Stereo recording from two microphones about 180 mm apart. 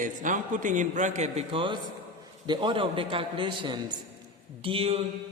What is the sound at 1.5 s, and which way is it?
A man's voice, 25° right (ahead or behind).